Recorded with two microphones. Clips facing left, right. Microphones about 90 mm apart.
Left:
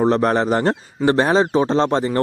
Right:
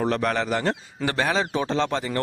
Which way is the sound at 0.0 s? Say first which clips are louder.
Left 7 dB; 30° left (ahead or behind).